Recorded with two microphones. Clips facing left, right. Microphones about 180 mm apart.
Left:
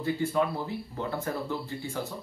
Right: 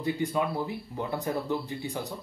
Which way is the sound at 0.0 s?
15° right (ahead or behind).